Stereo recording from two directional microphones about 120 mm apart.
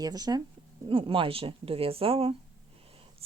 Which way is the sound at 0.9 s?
45° right (ahead or behind).